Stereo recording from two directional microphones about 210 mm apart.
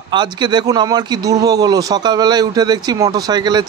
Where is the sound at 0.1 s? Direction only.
20° right (ahead or behind).